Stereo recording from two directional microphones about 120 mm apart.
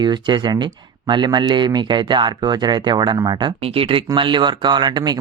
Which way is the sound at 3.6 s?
50° right (ahead or behind).